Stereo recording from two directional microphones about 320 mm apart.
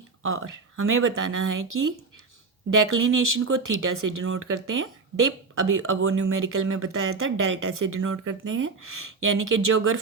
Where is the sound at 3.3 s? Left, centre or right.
Right.